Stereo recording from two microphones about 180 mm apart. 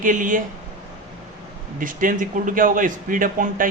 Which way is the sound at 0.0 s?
45° right (ahead or behind).